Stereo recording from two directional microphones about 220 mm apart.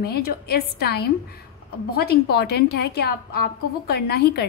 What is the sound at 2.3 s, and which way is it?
A woman's voice, 45° left (ahead or behind).